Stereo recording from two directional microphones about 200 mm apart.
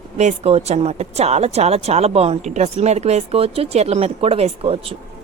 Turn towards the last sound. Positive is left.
turn(degrees=-30)  # may be behind; listen again after turning